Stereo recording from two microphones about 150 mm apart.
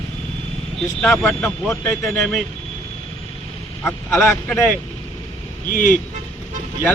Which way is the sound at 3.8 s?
15° left (ahead or behind).